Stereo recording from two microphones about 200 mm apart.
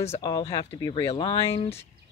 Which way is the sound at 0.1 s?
20° left (ahead or behind).